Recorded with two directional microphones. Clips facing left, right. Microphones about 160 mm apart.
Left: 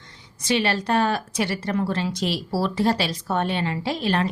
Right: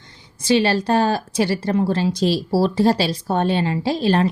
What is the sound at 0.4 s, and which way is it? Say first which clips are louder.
A woman's voice: right 5 dB; 35° right (ahead or behind).